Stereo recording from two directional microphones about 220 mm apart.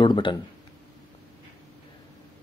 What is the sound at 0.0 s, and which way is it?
Speech, 20° left (ahead or behind).